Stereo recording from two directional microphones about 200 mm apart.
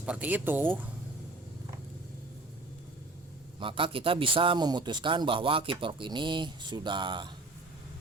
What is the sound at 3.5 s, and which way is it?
A man's voice, 25° right (ahead or behind).